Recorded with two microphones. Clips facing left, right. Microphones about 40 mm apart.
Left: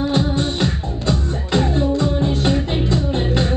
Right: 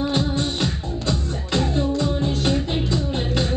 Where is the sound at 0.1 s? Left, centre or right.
Centre.